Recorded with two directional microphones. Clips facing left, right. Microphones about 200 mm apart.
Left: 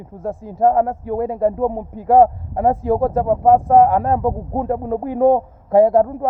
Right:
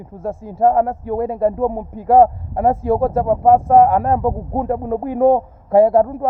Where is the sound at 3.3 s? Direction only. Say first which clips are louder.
Right 1 dB; 30° left (ahead or behind).